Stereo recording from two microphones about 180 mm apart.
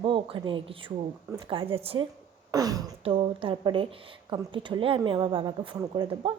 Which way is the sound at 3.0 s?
30° right (ahead or behind).